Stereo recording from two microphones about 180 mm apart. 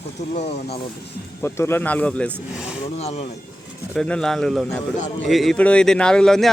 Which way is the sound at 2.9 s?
35° left (ahead or behind).